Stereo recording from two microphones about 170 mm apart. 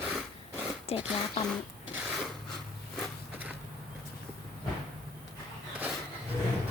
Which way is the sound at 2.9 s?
Centre (ahead or behind).